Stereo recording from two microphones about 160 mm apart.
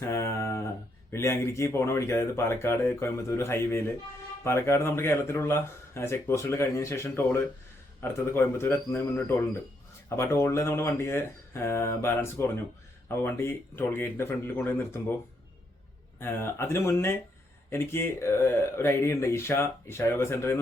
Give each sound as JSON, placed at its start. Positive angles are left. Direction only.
{"t": 0.0, "sound": "a sound", "side_deg": 15}
{"t": 1.1, "sound": "speech", "side_deg": 15}
{"t": 16.2, "sound": "speech", "side_deg": 15}